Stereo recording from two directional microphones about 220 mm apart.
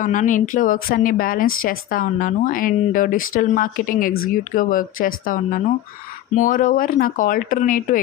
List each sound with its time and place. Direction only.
0.0 s a woman's voice: 35° left (ahead or behind)